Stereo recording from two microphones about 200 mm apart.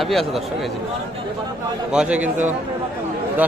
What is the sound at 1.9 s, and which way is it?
Speech, 5° right (ahead or behind).